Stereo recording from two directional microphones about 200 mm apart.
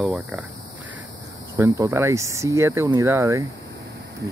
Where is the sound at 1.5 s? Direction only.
15° right (ahead or behind).